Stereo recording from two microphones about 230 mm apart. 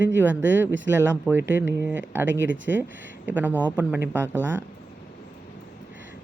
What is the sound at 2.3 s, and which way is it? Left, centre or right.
Speech, right.